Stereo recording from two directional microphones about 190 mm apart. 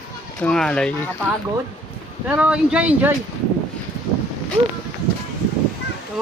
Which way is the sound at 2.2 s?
10° right (ahead or behind).